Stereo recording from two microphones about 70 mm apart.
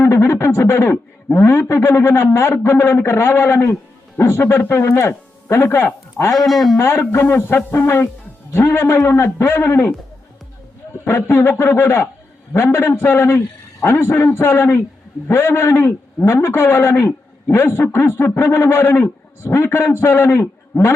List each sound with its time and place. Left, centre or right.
0.0 s a man's voice: left
6.3 s speech: centre
6.7 s a man's voice: left
10.9 s a man's voice: left